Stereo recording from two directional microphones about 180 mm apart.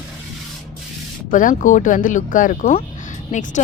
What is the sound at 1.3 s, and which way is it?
Speech, 45° left (ahead or behind).